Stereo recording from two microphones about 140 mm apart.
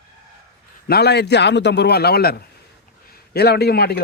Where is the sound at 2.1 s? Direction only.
90° left.